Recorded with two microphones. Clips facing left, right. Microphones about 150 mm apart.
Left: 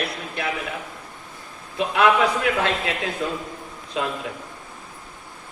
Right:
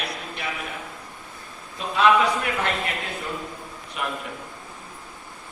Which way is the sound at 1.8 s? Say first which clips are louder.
Left 1 dB; 85° left.